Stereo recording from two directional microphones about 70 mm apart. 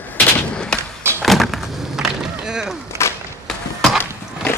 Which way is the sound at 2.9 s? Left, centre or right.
Right.